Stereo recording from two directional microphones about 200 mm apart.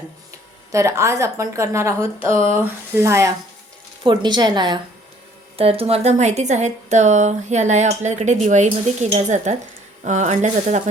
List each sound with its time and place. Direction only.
0.7 s a woman's voice: 15° right (ahead or behind); by 10.8 s 35° right (ahead or behind)